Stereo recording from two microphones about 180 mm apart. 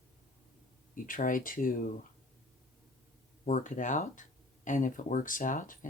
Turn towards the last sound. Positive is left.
turn(degrees=45)  # may be behind; listen again after turning